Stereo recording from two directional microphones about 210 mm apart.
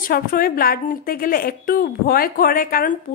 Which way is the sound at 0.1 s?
45° left (ahead or behind).